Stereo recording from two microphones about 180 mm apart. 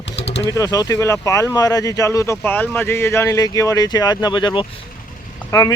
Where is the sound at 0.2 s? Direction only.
75° left (ahead or behind).